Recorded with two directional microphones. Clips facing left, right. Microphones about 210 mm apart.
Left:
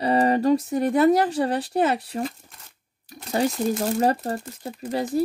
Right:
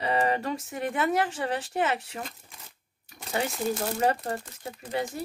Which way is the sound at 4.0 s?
40° left (ahead or behind).